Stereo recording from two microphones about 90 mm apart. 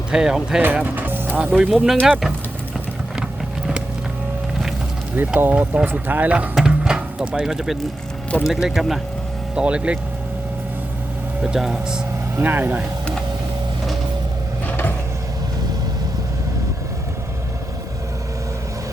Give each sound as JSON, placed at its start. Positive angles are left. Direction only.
{"t": 0.1, "sound": "speech", "side_deg": -10}
{"t": 0.6, "sound": "music", "side_deg": -20}
{"t": 1.4, "sound": "speech", "side_deg": -10}
{"t": 5.1, "sound": "speech", "side_deg": -20}
{"t": 11.4, "sound": "speech", "side_deg": -10}
{"t": 12.4, "sound": "speech", "side_deg": -20}